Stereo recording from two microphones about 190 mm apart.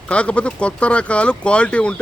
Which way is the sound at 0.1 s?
5° left (ahead or behind).